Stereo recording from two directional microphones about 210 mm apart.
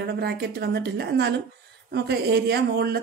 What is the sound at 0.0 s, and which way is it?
Speech, 50° right (ahead or behind).